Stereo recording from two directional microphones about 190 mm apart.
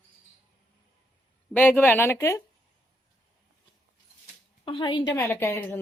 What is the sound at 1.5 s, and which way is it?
Speech, 10° left (ahead or behind).